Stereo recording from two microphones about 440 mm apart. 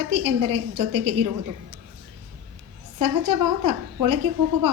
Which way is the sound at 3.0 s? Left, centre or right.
Right.